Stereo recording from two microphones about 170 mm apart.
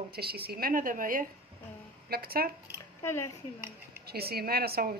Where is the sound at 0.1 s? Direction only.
65° right (ahead or behind).